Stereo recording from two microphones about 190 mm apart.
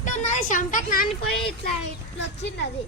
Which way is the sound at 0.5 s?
45° left (ahead or behind).